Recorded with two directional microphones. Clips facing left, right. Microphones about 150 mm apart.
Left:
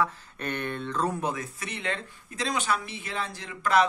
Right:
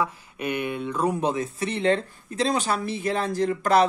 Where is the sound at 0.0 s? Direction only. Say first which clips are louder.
Right 2 dB; 10° right (ahead or behind).